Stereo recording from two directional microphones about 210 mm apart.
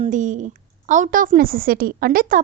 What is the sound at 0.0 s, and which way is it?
A woman's voice, 35° right (ahead or behind).